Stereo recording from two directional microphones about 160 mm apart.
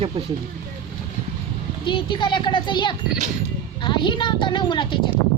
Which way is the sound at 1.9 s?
30° left (ahead or behind).